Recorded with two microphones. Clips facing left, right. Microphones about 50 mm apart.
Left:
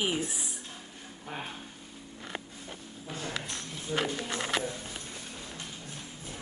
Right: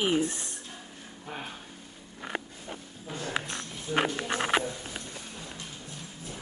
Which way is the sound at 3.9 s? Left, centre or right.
Right.